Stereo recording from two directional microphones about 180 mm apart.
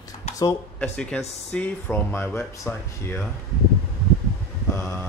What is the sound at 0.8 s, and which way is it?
Speech, 5° left (ahead or behind).